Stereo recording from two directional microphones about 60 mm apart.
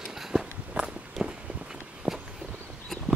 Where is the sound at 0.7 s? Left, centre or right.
Right.